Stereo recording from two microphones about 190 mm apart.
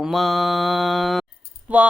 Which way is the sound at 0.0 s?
Centre (ahead or behind).